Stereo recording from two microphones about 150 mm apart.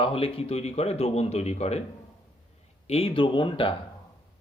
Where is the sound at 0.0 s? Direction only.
40° left (ahead or behind).